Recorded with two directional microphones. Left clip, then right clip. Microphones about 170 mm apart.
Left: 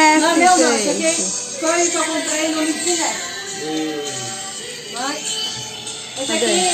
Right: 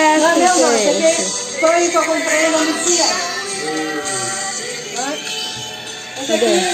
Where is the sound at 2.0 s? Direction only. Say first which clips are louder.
Right 5 dB; 45° right (ahead or behind).